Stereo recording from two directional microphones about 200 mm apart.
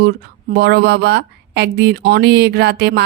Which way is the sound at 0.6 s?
55° right (ahead or behind).